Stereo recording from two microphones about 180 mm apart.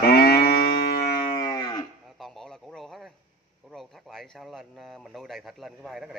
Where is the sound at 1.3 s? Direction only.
20° left (ahead or behind).